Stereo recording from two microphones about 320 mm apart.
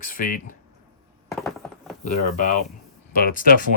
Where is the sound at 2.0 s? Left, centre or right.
Left.